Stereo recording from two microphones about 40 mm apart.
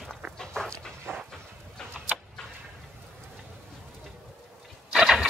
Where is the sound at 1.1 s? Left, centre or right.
Right.